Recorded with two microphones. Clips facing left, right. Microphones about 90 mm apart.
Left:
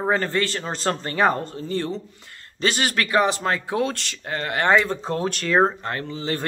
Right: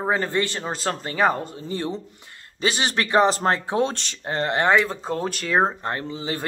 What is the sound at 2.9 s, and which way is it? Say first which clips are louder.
Speech: right 3 dB; 25° right (ahead or behind).